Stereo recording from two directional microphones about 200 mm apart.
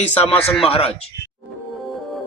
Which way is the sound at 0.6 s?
30° left (ahead or behind).